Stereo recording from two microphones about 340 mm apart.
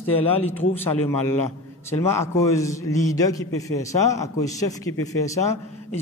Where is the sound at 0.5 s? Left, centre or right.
Centre.